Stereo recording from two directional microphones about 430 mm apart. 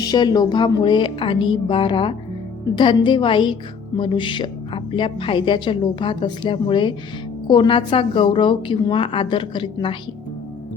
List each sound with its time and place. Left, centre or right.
0.0 s a woman's voice: centre